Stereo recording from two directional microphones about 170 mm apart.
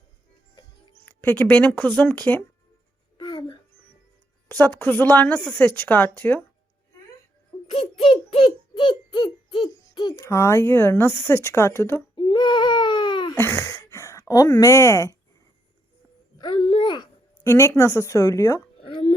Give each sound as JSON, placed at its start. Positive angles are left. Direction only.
{"t": 1.0, "sound": "speech", "side_deg": 10}
{"t": 3.2, "sound": "a sound", "side_deg": 25}
{"t": 4.4, "sound": "speech", "side_deg": 10}
{"t": 7.7, "sound": "a child's voice", "side_deg": 30}
{"t": 12.1, "sound": "baby cry", "side_deg": 30}
{"t": 13.3, "sound": "speech", "side_deg": 15}
{"t": 16.4, "sound": "a child's voice", "side_deg": 30}
{"t": 17.4, "sound": "speech", "side_deg": 15}
{"t": 18.8, "sound": "a sound", "side_deg": 30}